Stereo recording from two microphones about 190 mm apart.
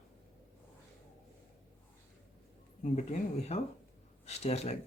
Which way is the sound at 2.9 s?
40° left (ahead or behind).